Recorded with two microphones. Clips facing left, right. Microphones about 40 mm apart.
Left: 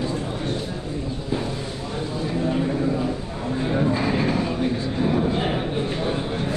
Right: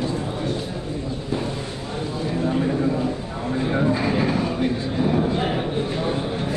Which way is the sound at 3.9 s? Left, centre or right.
Centre.